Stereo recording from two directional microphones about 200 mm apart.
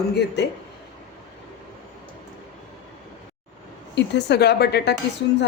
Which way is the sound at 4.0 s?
60° left (ahead or behind).